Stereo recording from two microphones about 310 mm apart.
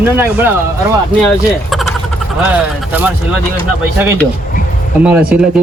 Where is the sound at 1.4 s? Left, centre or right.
Centre.